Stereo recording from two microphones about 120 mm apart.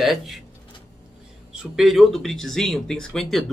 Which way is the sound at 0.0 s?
Centre (ahead or behind).